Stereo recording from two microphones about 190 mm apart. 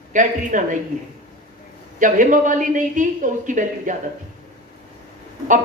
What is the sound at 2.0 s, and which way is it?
A woman's voice, 40° right (ahead or behind).